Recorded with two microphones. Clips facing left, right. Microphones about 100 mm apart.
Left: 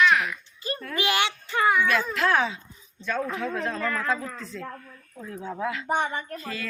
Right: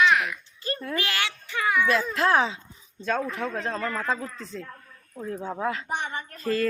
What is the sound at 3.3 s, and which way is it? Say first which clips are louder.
Speech: left 1 dB; 45° right (ahead or behind).